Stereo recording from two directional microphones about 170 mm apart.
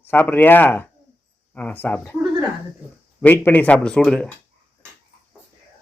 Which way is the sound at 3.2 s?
10° left (ahead or behind).